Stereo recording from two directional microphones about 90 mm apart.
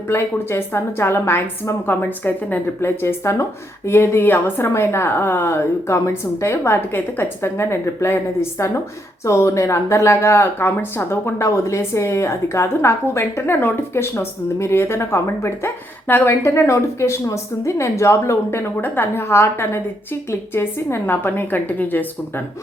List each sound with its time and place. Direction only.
0.1 s speech: 25° left (ahead or behind)